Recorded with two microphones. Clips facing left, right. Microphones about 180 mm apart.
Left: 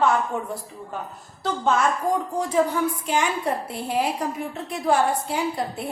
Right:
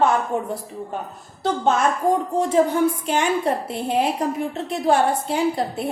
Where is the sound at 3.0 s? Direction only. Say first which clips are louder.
Right 3 dB; 25° right (ahead or behind).